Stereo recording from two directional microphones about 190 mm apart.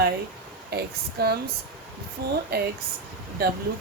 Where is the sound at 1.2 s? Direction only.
55° right (ahead or behind).